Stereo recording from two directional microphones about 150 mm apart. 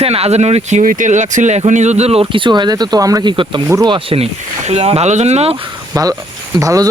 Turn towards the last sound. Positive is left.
turn(degrees=-20)  # may be behind; listen again after turning